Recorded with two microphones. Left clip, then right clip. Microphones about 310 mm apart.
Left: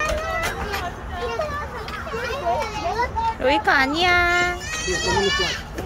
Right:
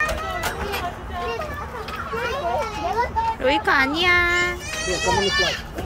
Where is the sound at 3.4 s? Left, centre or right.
Centre.